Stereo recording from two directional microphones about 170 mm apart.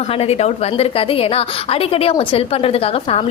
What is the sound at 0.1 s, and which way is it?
A woman's voice, 35° left (ahead or behind).